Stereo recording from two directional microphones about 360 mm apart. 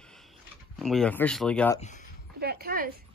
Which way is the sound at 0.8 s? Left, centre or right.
Centre.